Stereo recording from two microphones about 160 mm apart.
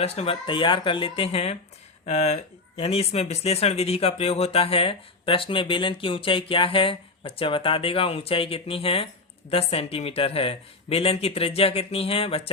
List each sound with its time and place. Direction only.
0.0 s speech: 40° left (ahead or behind)